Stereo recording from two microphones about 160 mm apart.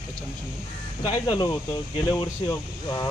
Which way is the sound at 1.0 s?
25° left (ahead or behind).